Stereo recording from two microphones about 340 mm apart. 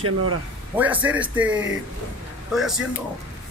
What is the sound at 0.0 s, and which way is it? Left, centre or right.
Speech, right.